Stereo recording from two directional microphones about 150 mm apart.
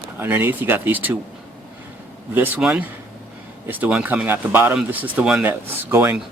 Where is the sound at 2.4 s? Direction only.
10° right (ahead or behind).